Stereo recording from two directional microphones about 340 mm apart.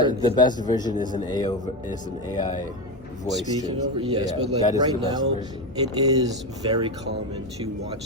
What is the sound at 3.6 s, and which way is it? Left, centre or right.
A man's voice, centre.